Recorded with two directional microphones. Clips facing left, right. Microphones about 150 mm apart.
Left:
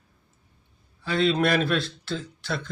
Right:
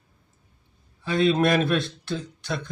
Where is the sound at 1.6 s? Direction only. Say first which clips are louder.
Right 2 dB; 20° right (ahead or behind).